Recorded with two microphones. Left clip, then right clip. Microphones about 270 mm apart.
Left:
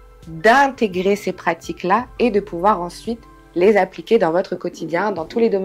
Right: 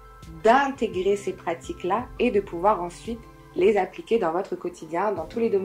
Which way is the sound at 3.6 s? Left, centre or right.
Left.